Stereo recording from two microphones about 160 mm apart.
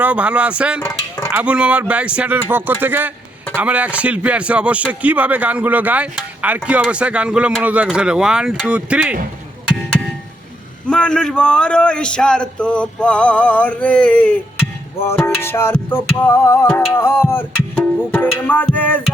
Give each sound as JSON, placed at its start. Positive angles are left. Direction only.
{"t": 0.0, "sound": "speech", "side_deg": -10}
{"t": 0.8, "sound": "dishes", "side_deg": 20}
{"t": 1.3, "sound": "speech", "side_deg": -10}
{"t": 10.8, "sound": "speech", "side_deg": 5}
{"t": 16.9, "sound": "music", "side_deg": 15}